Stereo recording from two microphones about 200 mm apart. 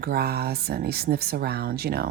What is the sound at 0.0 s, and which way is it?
Speech, 50° right (ahead or behind).